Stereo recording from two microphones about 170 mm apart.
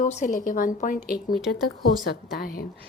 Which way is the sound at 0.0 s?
45° left (ahead or behind).